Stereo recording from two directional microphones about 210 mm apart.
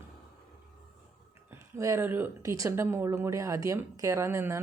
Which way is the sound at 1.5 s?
15° right (ahead or behind).